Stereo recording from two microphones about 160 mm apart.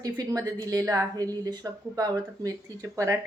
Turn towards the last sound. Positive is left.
turn(degrees=-20)  # may be behind; listen again after turning